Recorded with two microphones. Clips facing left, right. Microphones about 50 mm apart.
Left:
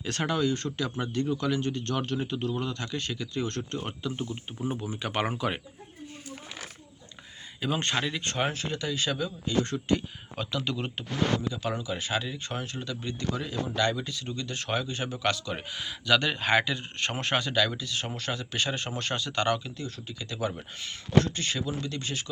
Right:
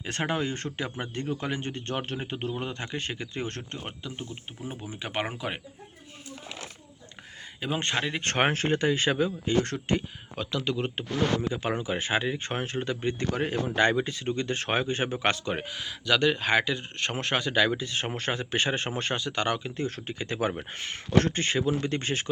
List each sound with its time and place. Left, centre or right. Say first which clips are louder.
0.0 s speech: left 1 dB; right
4.8 s speech: right 1 dB; right
7.6 s speech: even; right
8.2 s speech: right 5 dB; right
10.3 s speech: right 2 dB; centre
11.5 s speech: right 3 dB; right
13.3 s speech: right 5 dB; right
13.7 s speech: right 4 dB; right
15.7 s speech: left 3 dB; centre
17.5 s speech: right 3 dB; right
19.1 s speech: left 2 dB; centre
19.6 s speech: right 6 dB; right